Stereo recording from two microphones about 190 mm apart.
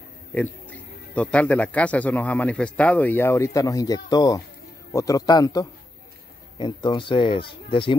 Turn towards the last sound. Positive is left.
turn(degrees=25)  # may be behind; listen again after turning